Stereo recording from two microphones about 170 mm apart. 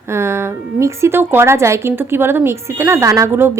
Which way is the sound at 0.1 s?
15° right (ahead or behind).